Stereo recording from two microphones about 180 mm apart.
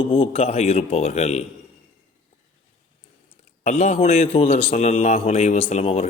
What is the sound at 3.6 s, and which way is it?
A man's voice, 40° left (ahead or behind).